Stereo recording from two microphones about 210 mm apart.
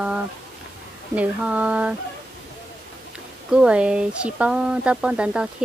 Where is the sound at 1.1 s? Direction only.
5° right (ahead or behind).